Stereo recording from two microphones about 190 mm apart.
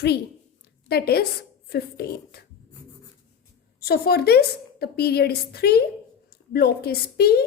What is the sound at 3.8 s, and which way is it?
A woman's voice, 55° left (ahead or behind).